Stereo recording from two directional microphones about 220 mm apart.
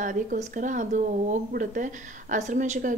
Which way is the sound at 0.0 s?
35° right (ahead or behind).